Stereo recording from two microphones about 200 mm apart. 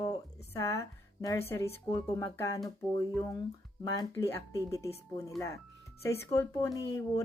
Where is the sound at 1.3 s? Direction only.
10° left (ahead or behind).